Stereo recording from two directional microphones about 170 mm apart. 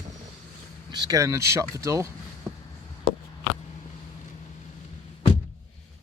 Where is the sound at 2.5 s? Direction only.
Centre (ahead or behind).